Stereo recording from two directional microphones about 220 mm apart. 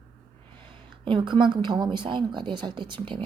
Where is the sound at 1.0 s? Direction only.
20° right (ahead or behind).